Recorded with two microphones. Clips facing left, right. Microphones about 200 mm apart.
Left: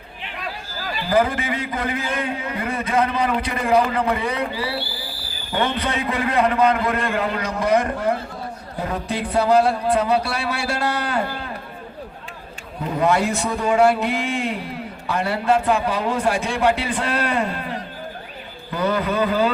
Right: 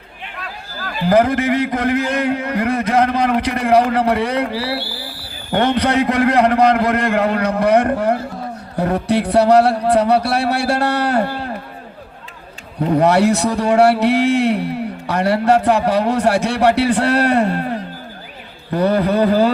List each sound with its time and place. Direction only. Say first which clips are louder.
1.0 s a man's voice: right 6 dB; 70° right (ahead or behind)
7.3 s a man's voice: right 4 dB; 65° right (ahead or behind)
12.9 s a man's voice: right 6 dB; 70° right (ahead or behind)
18.7 s a man's voice: right 6 dB; 35° right (ahead or behind)